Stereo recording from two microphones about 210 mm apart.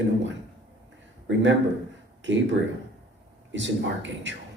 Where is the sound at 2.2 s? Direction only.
60° right (ahead or behind).